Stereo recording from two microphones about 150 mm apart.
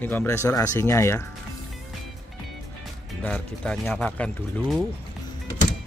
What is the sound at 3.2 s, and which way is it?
Speech, 10° left (ahead or behind).